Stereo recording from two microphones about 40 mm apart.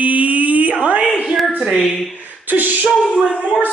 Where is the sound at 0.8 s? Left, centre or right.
Right.